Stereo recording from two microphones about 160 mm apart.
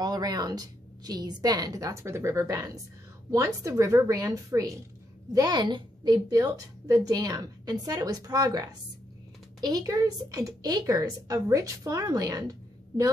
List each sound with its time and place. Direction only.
0.0 s a woman's voice: 25° right (ahead or behind)